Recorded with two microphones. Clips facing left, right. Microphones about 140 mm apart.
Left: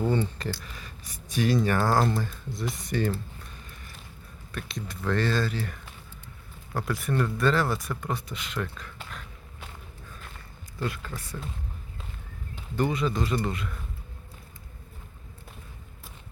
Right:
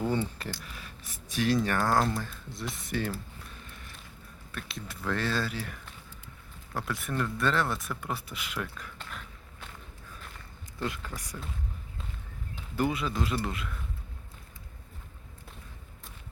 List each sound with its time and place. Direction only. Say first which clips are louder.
0.1 s speech: left 3 dB; 5° right (ahead or behind)
3.7 s a sound: left 1 dB; centre (ahead or behind)
4.5 s speech: left 4 dB; 5° right (ahead or behind)
10.8 s speech: left 2 dB; 15° right (ahead or behind)
12.5 s speech: left 2 dB; 5° right (ahead or behind)